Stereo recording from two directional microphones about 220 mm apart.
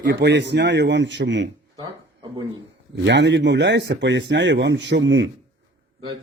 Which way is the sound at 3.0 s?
55° right (ahead or behind).